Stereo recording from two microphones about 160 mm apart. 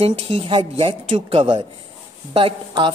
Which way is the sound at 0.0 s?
35° right (ahead or behind).